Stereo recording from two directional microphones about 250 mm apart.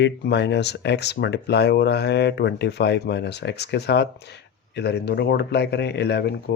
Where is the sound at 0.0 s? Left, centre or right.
Left.